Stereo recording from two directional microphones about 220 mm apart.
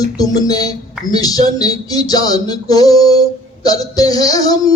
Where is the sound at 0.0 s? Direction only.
15° left (ahead or behind).